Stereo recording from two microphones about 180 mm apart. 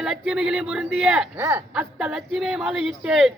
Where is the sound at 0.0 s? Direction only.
5° right (ahead or behind).